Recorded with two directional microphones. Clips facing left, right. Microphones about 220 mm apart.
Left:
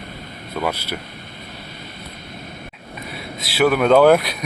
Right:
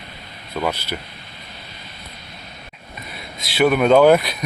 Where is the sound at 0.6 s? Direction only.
10° left (ahead or behind).